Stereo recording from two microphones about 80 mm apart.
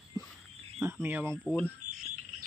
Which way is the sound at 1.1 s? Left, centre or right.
Right.